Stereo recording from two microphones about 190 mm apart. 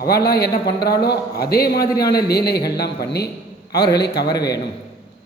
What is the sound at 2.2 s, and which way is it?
Speech, 55° left (ahead or behind).